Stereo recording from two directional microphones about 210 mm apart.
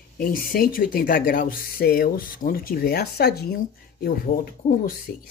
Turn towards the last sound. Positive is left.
turn(degrees=40)  # may be behind; listen again after turning